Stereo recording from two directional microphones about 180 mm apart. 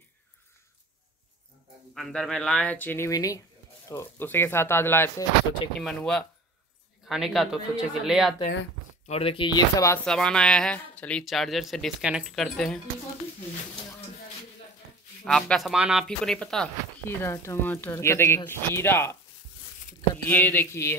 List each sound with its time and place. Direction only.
2.0 s speech: centre (ahead or behind)
5.8 s speech: centre (ahead or behind)
9.0 s speech: 35° left (ahead or behind)
10.0 s speech: 5° left (ahead or behind)
15.2 s speech: centre (ahead or behind)
20.2 s speech: 10° left (ahead or behind)